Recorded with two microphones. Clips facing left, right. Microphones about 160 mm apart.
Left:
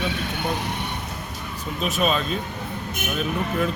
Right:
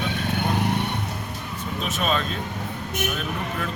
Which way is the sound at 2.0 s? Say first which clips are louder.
Left 2 dB; 5° left (ahead or behind).